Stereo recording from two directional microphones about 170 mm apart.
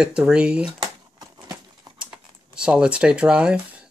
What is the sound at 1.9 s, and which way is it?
Typing, 25° right (ahead or behind).